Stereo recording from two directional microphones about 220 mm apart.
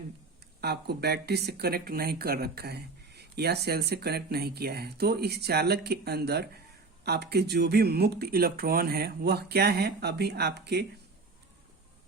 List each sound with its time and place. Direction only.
0.6 s speech: 45° right (ahead or behind)